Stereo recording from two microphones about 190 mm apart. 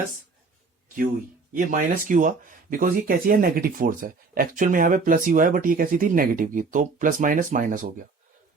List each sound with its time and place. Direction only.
1.5 s speech: 45° right (ahead or behind)